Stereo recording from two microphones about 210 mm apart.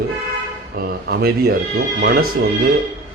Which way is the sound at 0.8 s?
45° right (ahead or behind).